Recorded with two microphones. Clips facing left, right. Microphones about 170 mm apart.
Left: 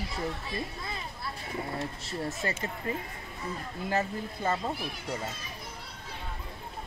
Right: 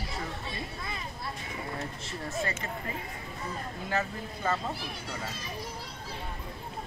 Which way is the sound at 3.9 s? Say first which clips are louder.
Left 2 dB; 25° left (ahead or behind).